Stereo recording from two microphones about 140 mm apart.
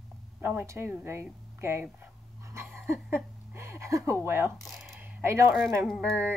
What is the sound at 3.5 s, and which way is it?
Speech, 20° right (ahead or behind).